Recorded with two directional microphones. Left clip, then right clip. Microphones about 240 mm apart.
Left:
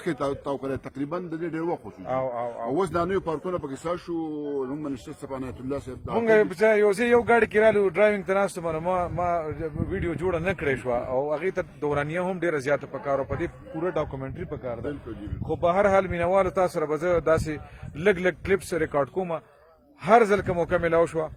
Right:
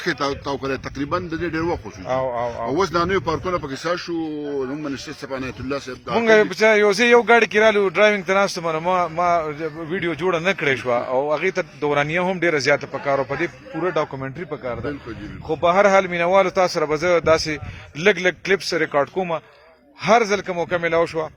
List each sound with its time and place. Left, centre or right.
0.0 s a man's voice: centre
2.0 s speech: right
2.7 s a man's voice: centre
6.1 s speech: right